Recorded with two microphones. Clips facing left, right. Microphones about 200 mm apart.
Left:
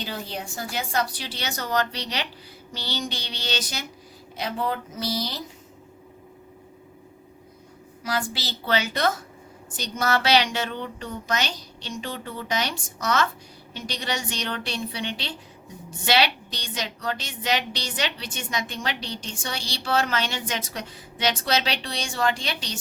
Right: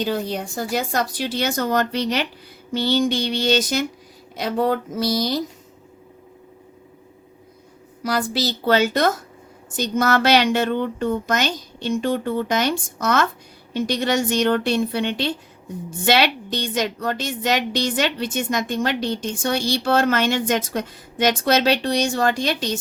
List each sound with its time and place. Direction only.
0.8 s a woman's voice: 45° right (ahead or behind)
8.0 s a woman's voice: 40° right (ahead or behind)